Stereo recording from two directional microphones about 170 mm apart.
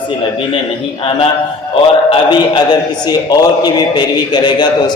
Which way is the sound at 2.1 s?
25° left (ahead or behind).